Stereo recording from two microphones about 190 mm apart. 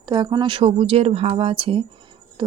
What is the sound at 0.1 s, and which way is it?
Speech, 25° right (ahead or behind).